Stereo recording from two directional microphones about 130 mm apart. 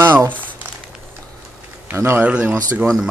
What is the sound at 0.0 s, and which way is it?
Crumpling, 15° right (ahead or behind).